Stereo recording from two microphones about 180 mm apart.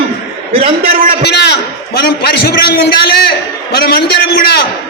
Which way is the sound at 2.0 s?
60° left (ahead or behind).